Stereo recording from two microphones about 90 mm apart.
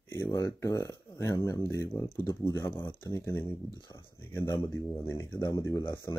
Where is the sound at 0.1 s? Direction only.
35° left (ahead or behind).